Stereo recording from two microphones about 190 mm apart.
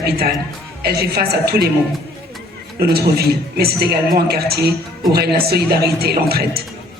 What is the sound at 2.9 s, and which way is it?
A man's voice, 55° right (ahead or behind).